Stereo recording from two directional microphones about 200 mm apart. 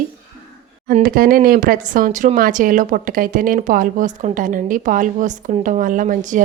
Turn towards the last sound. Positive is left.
turn(degrees=-40)  # may be behind; listen again after turning